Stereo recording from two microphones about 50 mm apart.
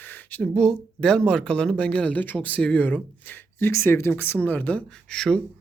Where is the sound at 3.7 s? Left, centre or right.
Left.